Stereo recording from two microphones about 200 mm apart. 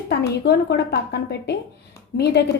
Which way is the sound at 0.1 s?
55° left (ahead or behind).